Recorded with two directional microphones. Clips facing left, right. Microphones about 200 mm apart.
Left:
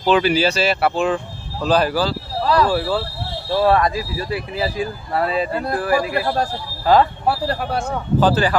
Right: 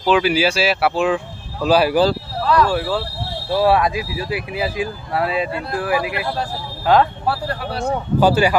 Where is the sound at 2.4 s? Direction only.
35° left (ahead or behind).